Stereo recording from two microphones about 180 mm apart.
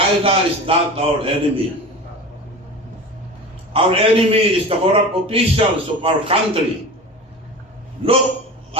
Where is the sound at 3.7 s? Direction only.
30° right (ahead or behind).